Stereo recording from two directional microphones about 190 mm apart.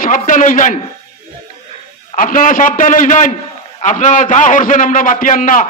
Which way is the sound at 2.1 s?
45° left (ahead or behind).